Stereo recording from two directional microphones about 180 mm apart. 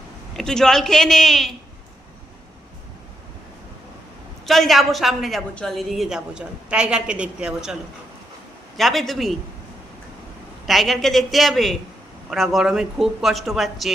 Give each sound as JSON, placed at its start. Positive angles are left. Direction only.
{"t": 0.3, "sound": "a woman's voice", "side_deg": 5}
{"t": 4.4, "sound": "a woman's voice", "side_deg": 0}
{"t": 8.8, "sound": "a woman's voice", "side_deg": 0}
{"t": 10.7, "sound": "a woman's voice", "side_deg": 0}